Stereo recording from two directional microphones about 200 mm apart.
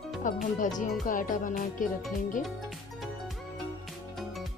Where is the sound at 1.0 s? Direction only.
40° left (ahead or behind).